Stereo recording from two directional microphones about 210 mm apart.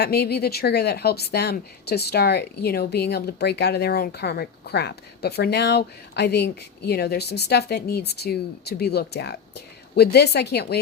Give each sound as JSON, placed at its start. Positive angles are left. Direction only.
{"t": 0.0, "sound": "a woman's voice", "side_deg": 50}